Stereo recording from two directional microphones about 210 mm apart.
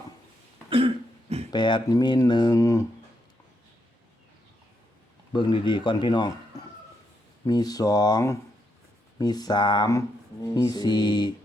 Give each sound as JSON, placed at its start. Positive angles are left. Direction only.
{"t": 0.7, "sound": "cough", "side_deg": -25}
{"t": 1.5, "sound": "speech", "side_deg": 20}
{"t": 5.3, "sound": "a man's voice", "side_deg": 20}